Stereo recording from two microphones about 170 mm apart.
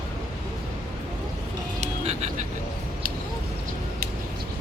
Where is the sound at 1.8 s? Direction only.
40° right (ahead or behind).